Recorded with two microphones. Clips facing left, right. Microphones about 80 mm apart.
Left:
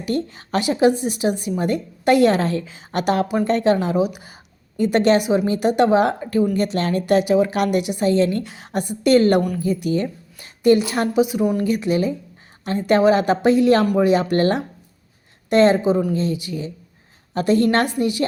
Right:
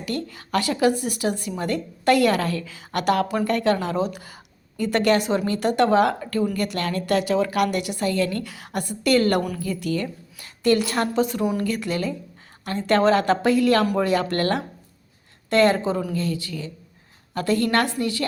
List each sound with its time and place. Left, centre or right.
0.0 s a woman's voice: left